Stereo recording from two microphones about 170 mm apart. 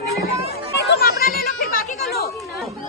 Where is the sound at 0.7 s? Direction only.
65° left (ahead or behind).